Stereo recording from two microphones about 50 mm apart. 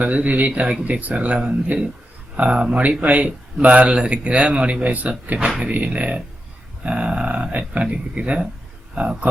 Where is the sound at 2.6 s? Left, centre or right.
Centre.